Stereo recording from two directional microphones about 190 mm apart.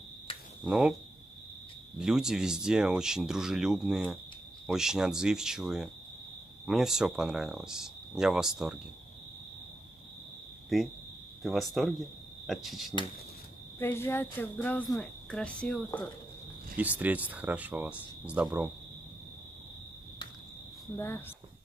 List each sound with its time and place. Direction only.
0.3 s finger snapping: 30° left (ahead or behind)
0.7 s speech: 5° right (ahead or behind)
2.0 s speech: 5° right (ahead or behind)
10.7 s speech: centre (ahead or behind)
13.7 s speech: 10° left (ahead or behind)
16.7 s speech: 10° right (ahead or behind)